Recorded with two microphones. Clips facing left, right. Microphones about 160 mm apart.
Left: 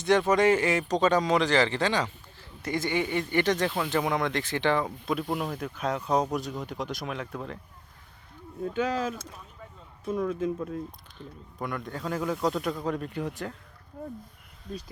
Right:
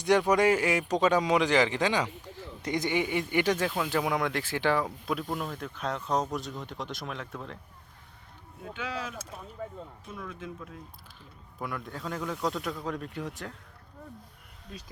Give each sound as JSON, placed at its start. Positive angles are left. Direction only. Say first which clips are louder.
{"t": 0.0, "sound": "speech", "louder": "left 1 dB", "side_deg": -15}
{"t": 5.2, "sound": "speech", "louder": "left 3 dB", "side_deg": 10}
{"t": 8.7, "sound": "speech", "louder": "left 8 dB", "side_deg": 45}
{"t": 9.6, "sound": "a sound", "louder": "right 12 dB", "side_deg": -50}
{"t": 10.1, "sound": "speech", "louder": "left 14 dB", "side_deg": 40}
{"t": 11.2, "sound": "speech", "louder": "left 3 dB", "side_deg": -5}